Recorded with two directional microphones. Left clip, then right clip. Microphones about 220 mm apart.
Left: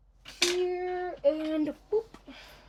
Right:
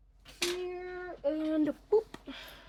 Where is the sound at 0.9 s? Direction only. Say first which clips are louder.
Left 5 dB; 10° right (ahead or behind).